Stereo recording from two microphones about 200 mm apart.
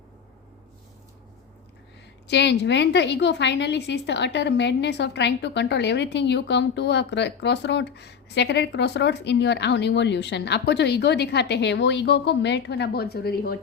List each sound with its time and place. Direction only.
2.2 s a woman's voice: 60° left (ahead or behind)